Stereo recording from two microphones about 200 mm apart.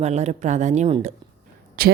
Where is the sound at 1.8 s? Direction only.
50° right (ahead or behind).